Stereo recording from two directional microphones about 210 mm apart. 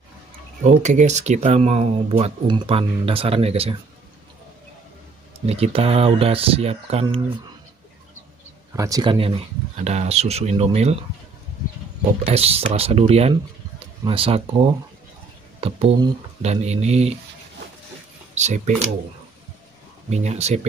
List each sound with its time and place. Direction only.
0.8 s speech: 35° right (ahead or behind)
5.5 s speech: 30° right (ahead or behind)
8.7 s speech: 15° right (ahead or behind)
12.3 s speech: 30° right (ahead or behind)
18.3 s speech: 35° right (ahead or behind)
20.1 s speech: 30° right (ahead or behind)